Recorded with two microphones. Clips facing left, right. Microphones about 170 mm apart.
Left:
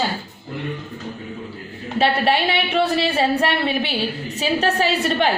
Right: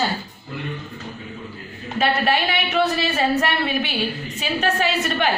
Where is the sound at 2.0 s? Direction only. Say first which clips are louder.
Left 2 dB; 30° left (ahead or behind).